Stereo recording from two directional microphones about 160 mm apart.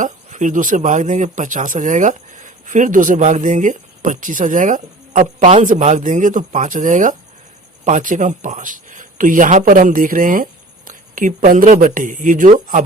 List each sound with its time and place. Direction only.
0.0 s speech: 50° right (ahead or behind)